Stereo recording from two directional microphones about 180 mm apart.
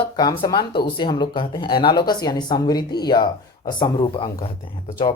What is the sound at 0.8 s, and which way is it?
Speech, 25° left (ahead or behind).